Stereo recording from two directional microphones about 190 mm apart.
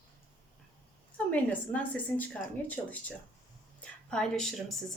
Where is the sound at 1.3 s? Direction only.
10° left (ahead or behind).